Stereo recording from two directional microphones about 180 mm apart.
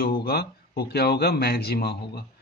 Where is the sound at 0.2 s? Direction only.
60° left (ahead or behind).